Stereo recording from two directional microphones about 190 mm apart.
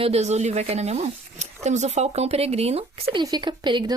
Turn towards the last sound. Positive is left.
turn(degrees=-20)  # may be behind; listen again after turning